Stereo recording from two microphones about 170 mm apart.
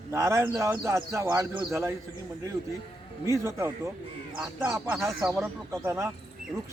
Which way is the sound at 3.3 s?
15° right (ahead or behind).